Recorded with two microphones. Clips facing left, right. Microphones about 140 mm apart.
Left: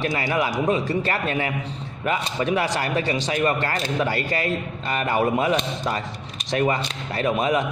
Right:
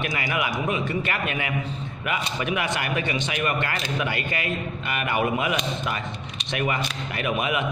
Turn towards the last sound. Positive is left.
turn(degrees=35)  # may be behind; listen again after turning